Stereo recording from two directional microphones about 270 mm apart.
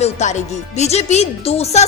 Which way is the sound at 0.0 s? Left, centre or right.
Left.